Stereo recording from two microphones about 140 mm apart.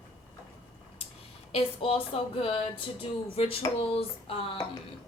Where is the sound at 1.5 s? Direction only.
45° left (ahead or behind).